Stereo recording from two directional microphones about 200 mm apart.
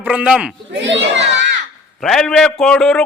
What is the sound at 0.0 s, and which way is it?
Speech, 5° right (ahead or behind).